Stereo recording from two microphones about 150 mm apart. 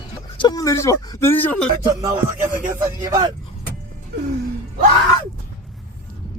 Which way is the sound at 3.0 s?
25° right (ahead or behind).